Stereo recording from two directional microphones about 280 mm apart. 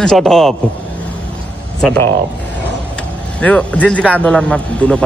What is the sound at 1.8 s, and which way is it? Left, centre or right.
Speech, centre.